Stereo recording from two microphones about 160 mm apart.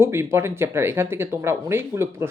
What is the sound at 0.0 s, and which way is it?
Speech, 15° right (ahead or behind).